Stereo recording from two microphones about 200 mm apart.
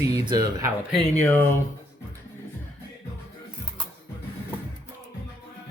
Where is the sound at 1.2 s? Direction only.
10° left (ahead or behind).